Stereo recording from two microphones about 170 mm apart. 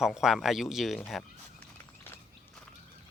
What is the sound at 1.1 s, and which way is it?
Fowl, 5° left (ahead or behind).